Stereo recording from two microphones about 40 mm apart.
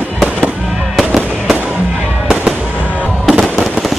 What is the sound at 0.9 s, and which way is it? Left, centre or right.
Fireworks, centre.